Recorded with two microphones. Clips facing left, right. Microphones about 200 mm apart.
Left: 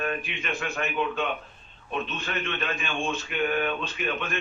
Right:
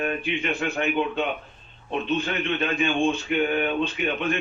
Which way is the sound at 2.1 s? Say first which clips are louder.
Right 7 dB; 30° right (ahead or behind).